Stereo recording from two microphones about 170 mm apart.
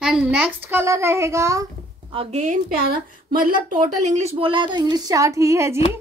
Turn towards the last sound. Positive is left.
turn(degrees=-15)  # may be behind; listen again after turning